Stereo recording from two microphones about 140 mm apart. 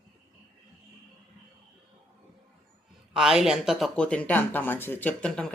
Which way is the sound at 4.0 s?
5° left (ahead or behind).